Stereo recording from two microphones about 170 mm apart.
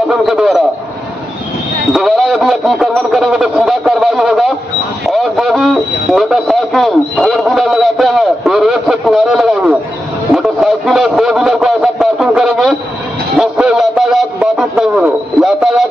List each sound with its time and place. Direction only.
0.1 s a man's voice: centre (ahead or behind)
2.0 s a man's voice: centre (ahead or behind)